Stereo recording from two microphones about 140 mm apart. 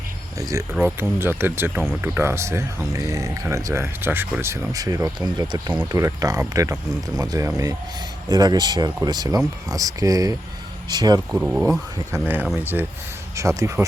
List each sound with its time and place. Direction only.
0.8 s speech: 15° right (ahead or behind); by 11.2 s 30° right (ahead or behind)
11.3 s speech: 10° right (ahead or behind)